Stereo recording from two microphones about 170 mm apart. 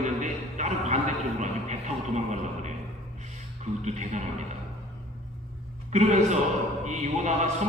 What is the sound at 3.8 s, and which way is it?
Speech, 45° right (ahead or behind).